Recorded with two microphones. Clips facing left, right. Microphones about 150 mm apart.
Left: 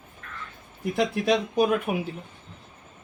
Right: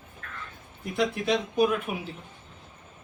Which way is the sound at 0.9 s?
55° left (ahead or behind).